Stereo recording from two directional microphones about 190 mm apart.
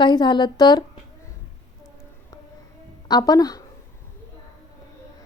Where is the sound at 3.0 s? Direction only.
20° left (ahead or behind).